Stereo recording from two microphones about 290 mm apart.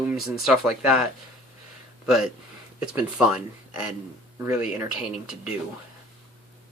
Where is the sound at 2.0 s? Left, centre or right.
Centre.